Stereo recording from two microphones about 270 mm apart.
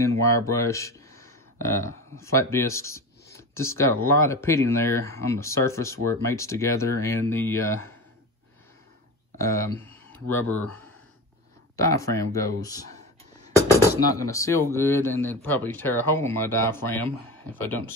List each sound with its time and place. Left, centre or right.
0.0 s speech: centre
9.4 s speech: centre
9.9 s a sound: centre
11.7 s speech: centre
14.2 s speech: centre